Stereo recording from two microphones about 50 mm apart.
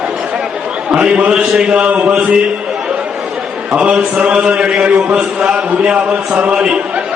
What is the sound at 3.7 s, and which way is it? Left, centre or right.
A man's voice, right.